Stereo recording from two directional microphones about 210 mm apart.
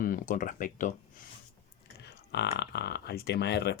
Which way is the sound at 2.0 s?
55° left (ahead or behind).